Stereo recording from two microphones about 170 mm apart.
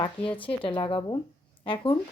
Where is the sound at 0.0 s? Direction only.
30° left (ahead or behind).